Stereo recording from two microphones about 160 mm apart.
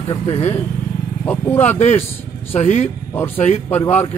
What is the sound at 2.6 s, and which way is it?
Speech, 45° left (ahead or behind).